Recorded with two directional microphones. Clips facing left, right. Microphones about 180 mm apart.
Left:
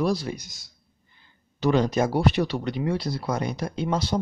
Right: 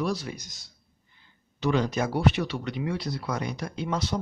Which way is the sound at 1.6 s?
35° left (ahead or behind).